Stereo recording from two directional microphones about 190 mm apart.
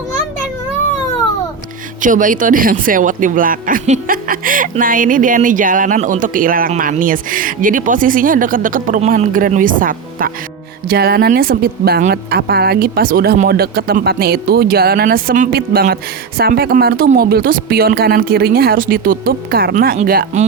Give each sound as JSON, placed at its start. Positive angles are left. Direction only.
{"t": 2.0, "sound": "speech", "side_deg": -45}